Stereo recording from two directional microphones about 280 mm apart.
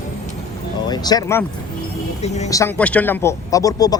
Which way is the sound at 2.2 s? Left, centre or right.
Left.